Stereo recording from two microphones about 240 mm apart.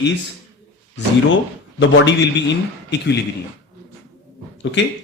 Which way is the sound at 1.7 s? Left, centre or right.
Left.